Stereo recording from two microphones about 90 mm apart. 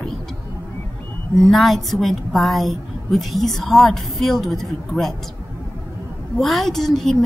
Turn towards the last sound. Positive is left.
turn(degrees=5)  # may be behind; listen again after turning